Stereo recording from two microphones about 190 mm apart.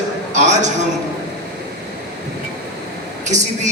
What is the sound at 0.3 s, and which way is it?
Speech, 40° right (ahead or behind).